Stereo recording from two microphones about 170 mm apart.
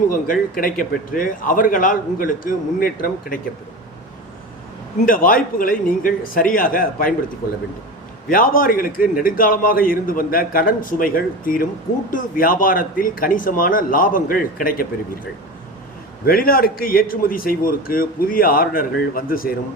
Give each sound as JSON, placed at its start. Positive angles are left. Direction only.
{"t": 0.1, "sound": "a man's voice", "side_deg": 55}
{"t": 5.0, "sound": "a man's voice", "side_deg": 55}
{"t": 8.3, "sound": "a man's voice", "side_deg": 55}
{"t": 16.2, "sound": "a man's voice", "side_deg": 60}